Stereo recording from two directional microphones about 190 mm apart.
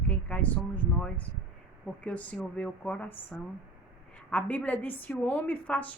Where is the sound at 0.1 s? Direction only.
5° left (ahead or behind).